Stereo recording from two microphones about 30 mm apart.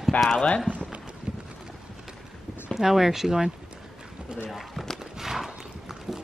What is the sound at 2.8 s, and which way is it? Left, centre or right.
Speech, centre.